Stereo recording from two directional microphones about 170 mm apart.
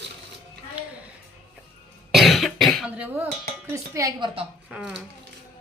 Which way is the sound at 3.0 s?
10° right (ahead or behind).